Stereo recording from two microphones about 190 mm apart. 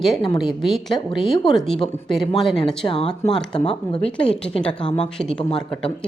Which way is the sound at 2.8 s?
30° left (ahead or behind).